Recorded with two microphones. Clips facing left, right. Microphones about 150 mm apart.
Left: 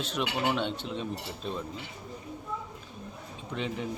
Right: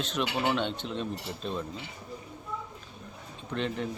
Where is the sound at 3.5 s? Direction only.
5° left (ahead or behind).